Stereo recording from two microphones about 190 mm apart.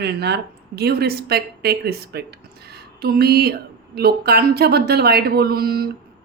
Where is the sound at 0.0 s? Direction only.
60° right (ahead or behind).